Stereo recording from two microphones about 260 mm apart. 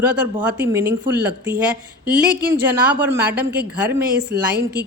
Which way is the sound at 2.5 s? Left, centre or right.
Centre.